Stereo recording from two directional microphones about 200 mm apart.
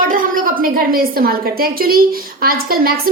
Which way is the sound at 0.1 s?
45° right (ahead or behind).